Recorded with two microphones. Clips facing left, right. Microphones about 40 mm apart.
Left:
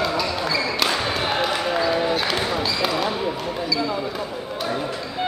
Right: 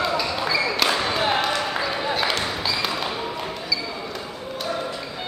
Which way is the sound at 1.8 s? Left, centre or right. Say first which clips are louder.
Left 3 dB; centre.